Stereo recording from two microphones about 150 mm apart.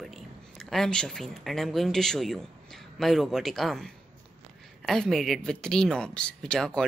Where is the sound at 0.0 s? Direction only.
Centre (ahead or behind).